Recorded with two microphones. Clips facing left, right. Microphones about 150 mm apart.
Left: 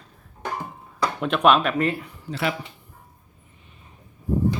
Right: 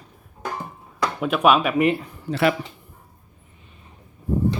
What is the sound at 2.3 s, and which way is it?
Speech, 60° right (ahead or behind).